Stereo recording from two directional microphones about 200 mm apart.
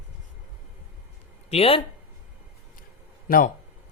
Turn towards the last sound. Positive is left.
turn(degrees=45)  # may be behind; listen again after turning